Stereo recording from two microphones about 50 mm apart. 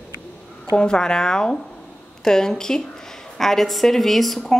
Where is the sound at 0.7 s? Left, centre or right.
Centre.